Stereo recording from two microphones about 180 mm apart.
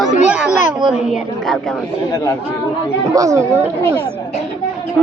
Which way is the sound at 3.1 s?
15° right (ahead or behind).